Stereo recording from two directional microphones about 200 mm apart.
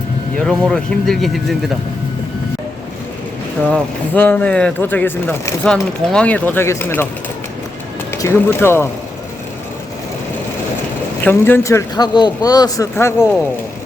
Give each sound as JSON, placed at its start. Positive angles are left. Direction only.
{"t": 0.3, "sound": "speech", "side_deg": 0}
{"t": 3.7, "sound": "speech", "side_deg": 10}
{"t": 8.2, "sound": "speech", "side_deg": 10}
{"t": 11.2, "sound": "speech", "side_deg": 10}